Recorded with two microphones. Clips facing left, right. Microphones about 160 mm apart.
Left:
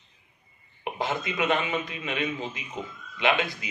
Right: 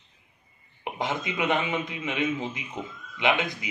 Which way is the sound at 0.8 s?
15° right (ahead or behind).